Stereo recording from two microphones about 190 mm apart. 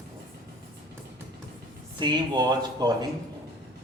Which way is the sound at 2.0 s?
25° right (ahead or behind).